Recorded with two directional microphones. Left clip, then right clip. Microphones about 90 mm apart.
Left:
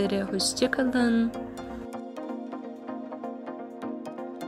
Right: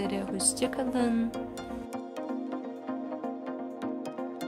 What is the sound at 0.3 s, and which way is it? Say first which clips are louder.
Speech: left 5 dB; 15° left (ahead or behind).